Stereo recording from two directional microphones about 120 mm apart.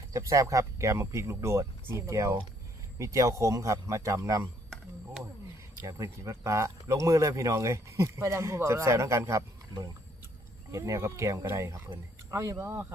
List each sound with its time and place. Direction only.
0.1 s speech: 25° right (ahead or behind)
5.8 s speech: 25° right (ahead or behind)